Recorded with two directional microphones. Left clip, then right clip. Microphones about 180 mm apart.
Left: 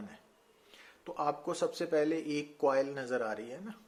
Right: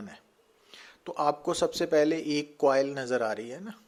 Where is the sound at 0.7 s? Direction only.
40° right (ahead or behind).